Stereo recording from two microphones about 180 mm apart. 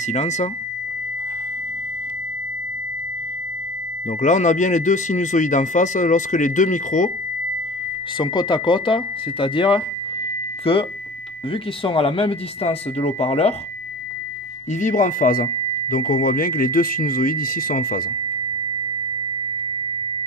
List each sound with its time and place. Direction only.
0.0 s speech: 40° left (ahead or behind)
4.2 s speech: 40° left (ahead or behind)
8.2 s speech: 25° left (ahead or behind)
14.7 s speech: 45° left (ahead or behind)